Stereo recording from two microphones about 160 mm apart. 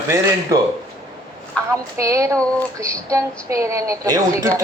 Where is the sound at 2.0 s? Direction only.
20° right (ahead or behind).